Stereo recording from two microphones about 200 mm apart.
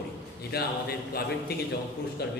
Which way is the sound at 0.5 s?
50° left (ahead or behind).